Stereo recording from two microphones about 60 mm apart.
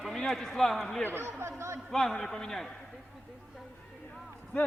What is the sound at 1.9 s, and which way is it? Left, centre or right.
Speech, centre.